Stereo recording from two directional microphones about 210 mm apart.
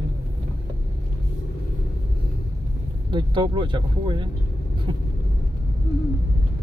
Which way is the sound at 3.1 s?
20° right (ahead or behind).